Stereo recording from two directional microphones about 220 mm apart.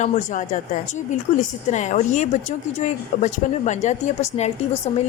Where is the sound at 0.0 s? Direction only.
35° left (ahead or behind).